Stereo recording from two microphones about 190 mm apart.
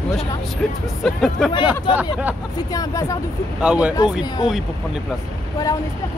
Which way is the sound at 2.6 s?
20° left (ahead or behind).